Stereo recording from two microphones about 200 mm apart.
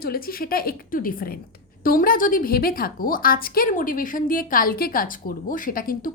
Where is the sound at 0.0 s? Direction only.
50° left (ahead or behind).